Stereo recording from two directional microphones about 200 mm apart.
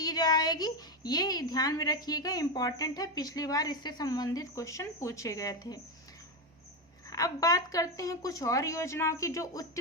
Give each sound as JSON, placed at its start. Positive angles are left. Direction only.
{"t": 0.0, "sound": "a woman's voice", "side_deg": 20}
{"t": 7.1, "sound": "a woman's voice", "side_deg": 15}